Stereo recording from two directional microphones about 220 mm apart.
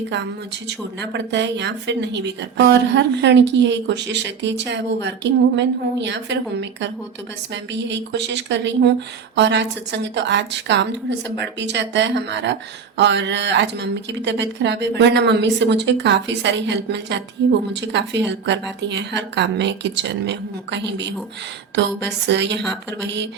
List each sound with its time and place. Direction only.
1.1 s speech: 50° right (ahead or behind)
22.3 s speech: 50° right (ahead or behind)